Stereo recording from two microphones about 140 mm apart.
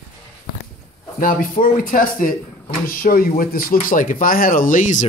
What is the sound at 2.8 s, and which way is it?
Speech, 90° left.